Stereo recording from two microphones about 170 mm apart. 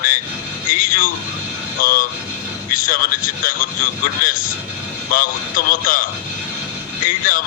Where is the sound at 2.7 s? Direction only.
55° left (ahead or behind).